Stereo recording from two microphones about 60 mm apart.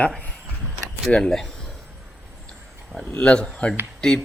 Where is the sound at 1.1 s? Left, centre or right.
Centre.